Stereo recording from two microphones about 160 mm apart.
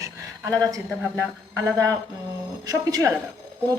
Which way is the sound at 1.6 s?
20° right (ahead or behind).